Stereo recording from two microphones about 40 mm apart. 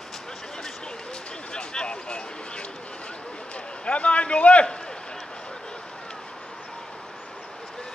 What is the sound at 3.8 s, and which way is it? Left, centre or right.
Speech, left.